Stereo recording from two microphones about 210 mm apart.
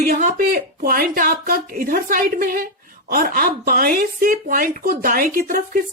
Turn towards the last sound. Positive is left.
turn(degrees=-45)  # may be behind; listen again after turning